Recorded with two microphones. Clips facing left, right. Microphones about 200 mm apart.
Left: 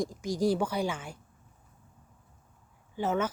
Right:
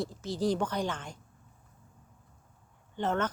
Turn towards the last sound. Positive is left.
turn(degrees=5)  # may be behind; listen again after turning